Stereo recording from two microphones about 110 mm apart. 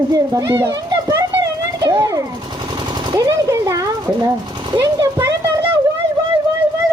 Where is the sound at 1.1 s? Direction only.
30° right (ahead or behind).